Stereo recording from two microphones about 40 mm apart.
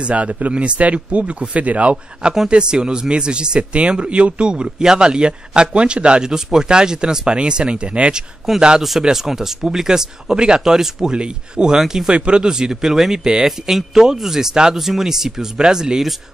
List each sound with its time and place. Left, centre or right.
0.0 s speech: right
2.5 s speech: right
6.2 s speech: centre
8.5 s speech: centre
13.5 s speech: centre